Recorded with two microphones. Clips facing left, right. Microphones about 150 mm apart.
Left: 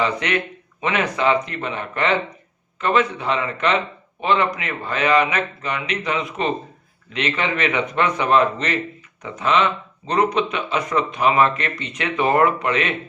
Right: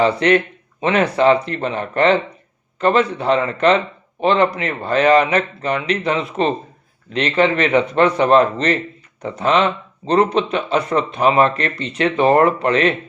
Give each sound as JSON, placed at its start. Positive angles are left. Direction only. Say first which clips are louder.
{"t": 0.0, "sound": "speech", "louder": "right 7 dB", "side_deg": -35}